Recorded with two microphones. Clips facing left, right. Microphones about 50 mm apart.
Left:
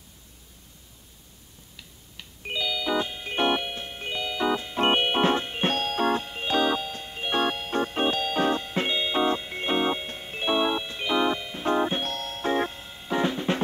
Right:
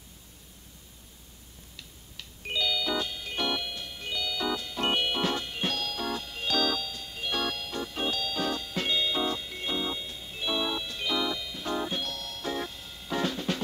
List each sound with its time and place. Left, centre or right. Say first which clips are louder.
1.8 s music: left 1 dB; centre